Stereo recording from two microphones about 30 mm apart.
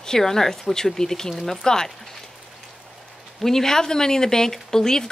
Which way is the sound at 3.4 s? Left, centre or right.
Centre.